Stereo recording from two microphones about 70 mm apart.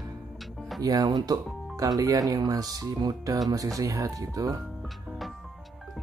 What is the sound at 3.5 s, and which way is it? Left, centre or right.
Speech, right.